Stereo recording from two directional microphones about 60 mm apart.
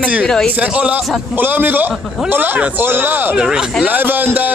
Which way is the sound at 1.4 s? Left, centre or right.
Right.